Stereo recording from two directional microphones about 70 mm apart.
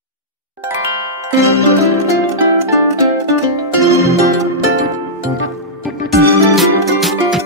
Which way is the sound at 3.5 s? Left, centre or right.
Right.